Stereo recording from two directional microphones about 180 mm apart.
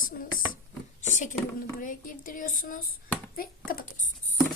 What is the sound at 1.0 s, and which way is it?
Speech, 45° left (ahead or behind).